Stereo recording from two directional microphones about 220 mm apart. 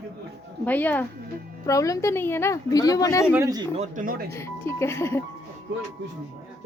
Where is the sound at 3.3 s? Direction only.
15° right (ahead or behind).